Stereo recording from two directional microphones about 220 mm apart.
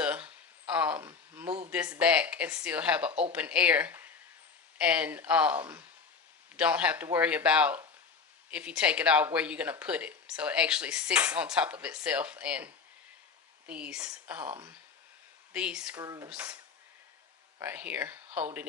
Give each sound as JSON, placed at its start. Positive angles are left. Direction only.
{"t": 0.0, "sound": "a sound", "side_deg": -5}
{"t": 2.0, "sound": "speech", "side_deg": -5}
{"t": 16.0, "sound": "speech", "side_deg": -15}
{"t": 17.6, "sound": "speech", "side_deg": -10}